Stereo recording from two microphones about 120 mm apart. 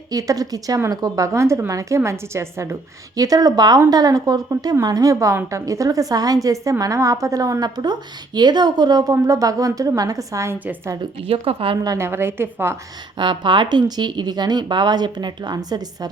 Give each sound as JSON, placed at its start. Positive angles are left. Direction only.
{"t": 0.1, "sound": "a woman's voice", "side_deg": -30}
{"t": 11.0, "sound": "a woman's voice", "side_deg": -50}
{"t": 11.9, "sound": "a woman's voice", "side_deg": -20}
{"t": 13.1, "sound": "a woman's voice", "side_deg": -40}